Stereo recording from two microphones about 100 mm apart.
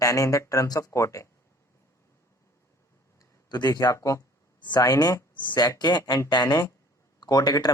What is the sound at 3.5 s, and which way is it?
Speech, 40° left (ahead or behind).